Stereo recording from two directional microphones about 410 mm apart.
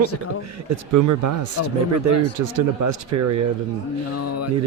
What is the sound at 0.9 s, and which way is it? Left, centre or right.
Speech, right.